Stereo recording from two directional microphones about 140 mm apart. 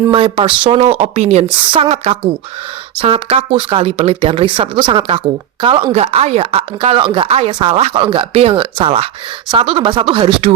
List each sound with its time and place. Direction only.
0.1 s speech: 40° right (ahead or behind)